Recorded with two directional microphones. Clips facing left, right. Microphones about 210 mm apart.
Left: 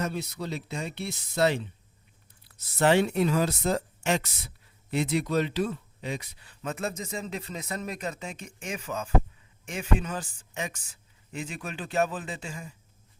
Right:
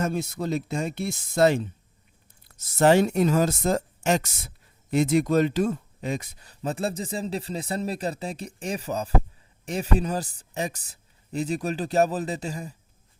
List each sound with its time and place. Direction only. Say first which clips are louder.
0.0 s speech: right 5 dB; 45° right (ahead or behind)